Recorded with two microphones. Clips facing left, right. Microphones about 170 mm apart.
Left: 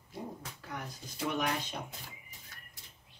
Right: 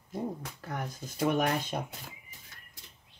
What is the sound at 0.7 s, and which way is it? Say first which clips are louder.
Speech: right 6 dB; 50° right (ahead or behind).